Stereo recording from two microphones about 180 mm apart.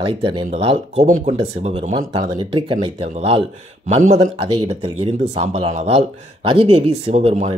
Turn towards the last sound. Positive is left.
turn(degrees=-40)  # may be behind; listen again after turning